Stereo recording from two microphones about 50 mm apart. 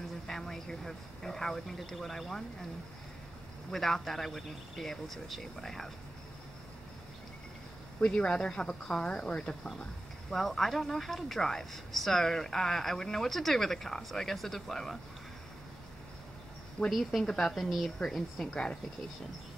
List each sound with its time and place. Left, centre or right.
0.3 s speech: centre
3.7 s speech: centre
8.0 s speech: left
10.3 s a woman's voice: centre
16.9 s speech: centre
18.5 s speech: centre